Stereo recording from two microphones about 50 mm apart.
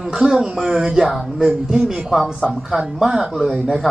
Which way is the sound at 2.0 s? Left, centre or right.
Centre.